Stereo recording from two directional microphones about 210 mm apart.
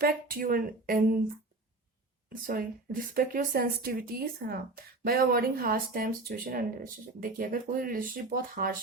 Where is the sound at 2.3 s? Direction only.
40° right (ahead or behind).